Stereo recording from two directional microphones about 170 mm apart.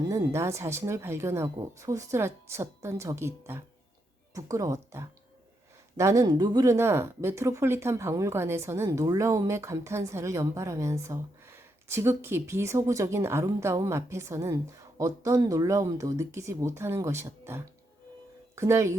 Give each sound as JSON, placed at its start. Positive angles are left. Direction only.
{"t": 0.1, "sound": "speech", "side_deg": -15}